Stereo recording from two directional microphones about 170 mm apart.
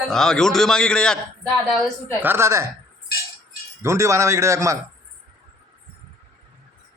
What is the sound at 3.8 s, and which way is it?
Speech, 15° right (ahead or behind).